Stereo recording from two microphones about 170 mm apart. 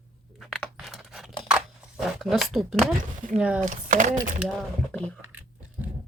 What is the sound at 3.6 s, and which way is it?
Speech, 50° right (ahead or behind).